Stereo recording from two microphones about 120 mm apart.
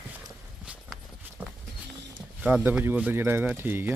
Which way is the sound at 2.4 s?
10° right (ahead or behind).